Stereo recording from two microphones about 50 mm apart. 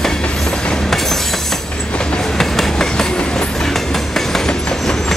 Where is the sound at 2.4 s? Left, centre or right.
Centre.